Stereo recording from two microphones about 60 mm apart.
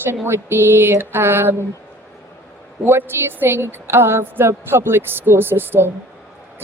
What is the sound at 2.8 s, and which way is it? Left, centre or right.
A woman's voice, right.